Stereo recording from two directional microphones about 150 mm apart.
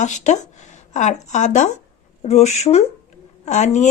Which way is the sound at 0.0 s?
55° left (ahead or behind).